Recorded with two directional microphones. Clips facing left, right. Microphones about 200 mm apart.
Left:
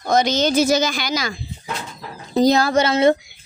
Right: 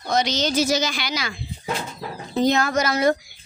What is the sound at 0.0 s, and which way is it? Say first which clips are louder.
Speech: left 5 dB; 50° left (ahead or behind).